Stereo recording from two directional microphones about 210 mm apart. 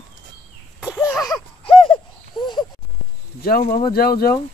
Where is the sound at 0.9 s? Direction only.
10° left (ahead or behind).